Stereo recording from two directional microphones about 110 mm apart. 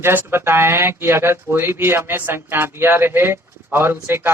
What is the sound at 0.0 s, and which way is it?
A man's voice, 20° right (ahead or behind).